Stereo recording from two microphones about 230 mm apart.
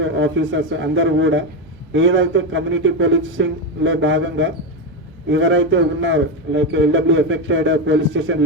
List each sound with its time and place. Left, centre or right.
0.0 s a man's voice: right